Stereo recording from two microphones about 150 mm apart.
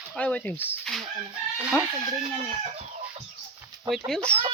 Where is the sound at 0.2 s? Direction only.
10° left (ahead or behind).